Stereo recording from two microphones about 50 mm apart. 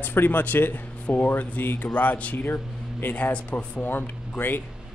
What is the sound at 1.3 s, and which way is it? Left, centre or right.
Speech, left.